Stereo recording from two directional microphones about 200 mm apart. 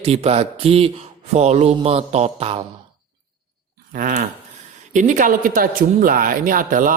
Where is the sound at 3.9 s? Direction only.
40° right (ahead or behind).